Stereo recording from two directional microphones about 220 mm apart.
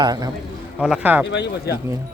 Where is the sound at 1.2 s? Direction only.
50° left (ahead or behind).